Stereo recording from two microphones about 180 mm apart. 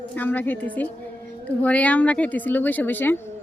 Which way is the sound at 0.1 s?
10° left (ahead or behind).